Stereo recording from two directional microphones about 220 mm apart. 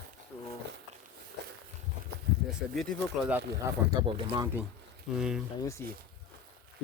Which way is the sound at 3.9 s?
20° right (ahead or behind).